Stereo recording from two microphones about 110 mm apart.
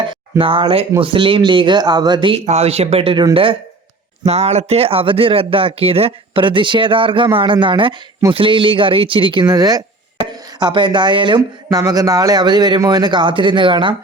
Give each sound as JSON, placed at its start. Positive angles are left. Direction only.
{"t": 0.1, "sound": "speech", "side_deg": -55}
{"t": 2.3, "sound": "speech", "side_deg": -75}
{"t": 4.2, "sound": "speech", "side_deg": -70}
{"t": 11.7, "sound": "a man's voice", "side_deg": -35}